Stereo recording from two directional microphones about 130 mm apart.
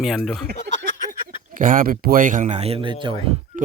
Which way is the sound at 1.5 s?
90° right.